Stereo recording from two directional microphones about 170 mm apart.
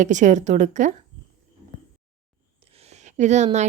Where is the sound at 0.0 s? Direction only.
45° right (ahead or behind).